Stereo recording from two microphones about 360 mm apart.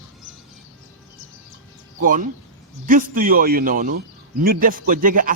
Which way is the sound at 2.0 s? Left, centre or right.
Right.